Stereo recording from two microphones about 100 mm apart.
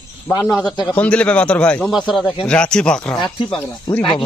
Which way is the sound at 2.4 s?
10° left (ahead or behind).